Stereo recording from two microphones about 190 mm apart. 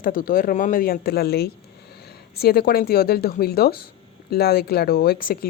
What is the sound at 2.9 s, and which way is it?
Speech, 55° left (ahead or behind).